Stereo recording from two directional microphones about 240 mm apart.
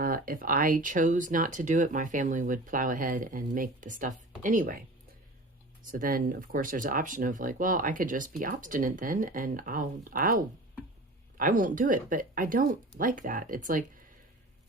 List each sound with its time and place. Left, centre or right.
0.0 s speech: right
5.8 s speech: right